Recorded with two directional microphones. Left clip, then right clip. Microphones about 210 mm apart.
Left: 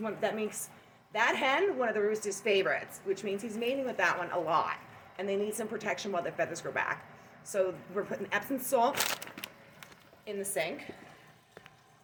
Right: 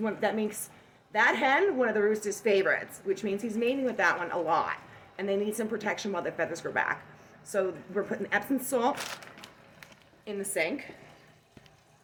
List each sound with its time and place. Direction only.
0.0 s a woman's voice: 10° right (ahead or behind)
9.4 s a sound: 45° left (ahead or behind)
10.2 s a woman's voice: 15° right (ahead or behind)